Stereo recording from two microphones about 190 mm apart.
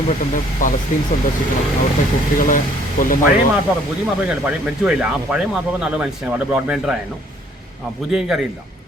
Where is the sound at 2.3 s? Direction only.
45° left (ahead or behind).